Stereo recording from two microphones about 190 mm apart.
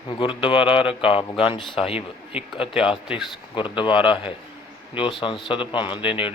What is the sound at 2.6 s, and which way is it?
Speech, 5° right (ahead or behind).